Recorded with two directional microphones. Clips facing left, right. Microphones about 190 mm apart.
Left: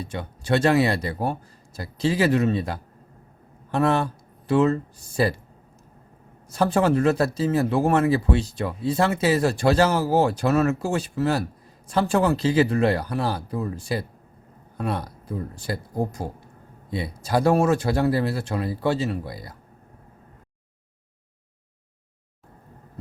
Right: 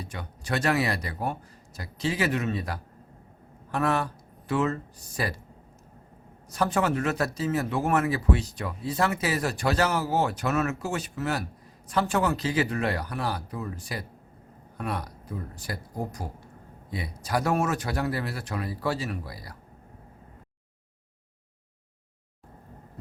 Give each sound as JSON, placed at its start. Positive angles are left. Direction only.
{"t": 0.0, "sound": "speech", "side_deg": 30}
{"t": 6.5, "sound": "speech", "side_deg": 30}